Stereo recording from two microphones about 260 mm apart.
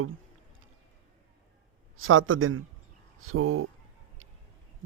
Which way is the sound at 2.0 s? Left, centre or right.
Right.